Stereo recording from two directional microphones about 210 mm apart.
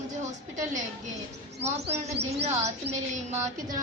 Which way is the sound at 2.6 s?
30° right (ahead or behind).